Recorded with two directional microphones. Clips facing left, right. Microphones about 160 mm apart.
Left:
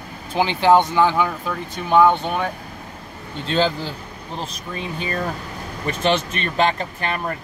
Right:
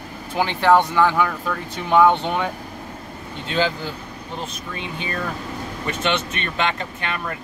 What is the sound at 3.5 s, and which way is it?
Speech, 35° left (ahead or behind).